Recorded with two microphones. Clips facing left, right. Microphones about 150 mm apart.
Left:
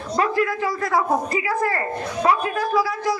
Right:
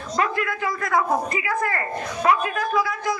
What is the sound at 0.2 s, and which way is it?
A woman's voice, 30° left (ahead or behind).